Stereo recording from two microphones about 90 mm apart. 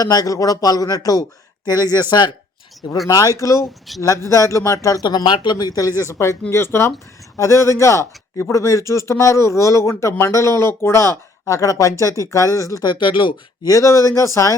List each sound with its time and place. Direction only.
0.0 s speech: 45° left (ahead or behind)
3.1 s speech: 40° left (ahead or behind)
5.0 s speech: 55° left (ahead or behind); by 12.8 s 35° left (ahead or behind)
12.8 s speech: 60° left (ahead or behind)
13.7 s speech: 35° left (ahead or behind)